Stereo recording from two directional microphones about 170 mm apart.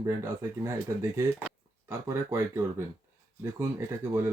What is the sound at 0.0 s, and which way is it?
Speech, 15° right (ahead or behind).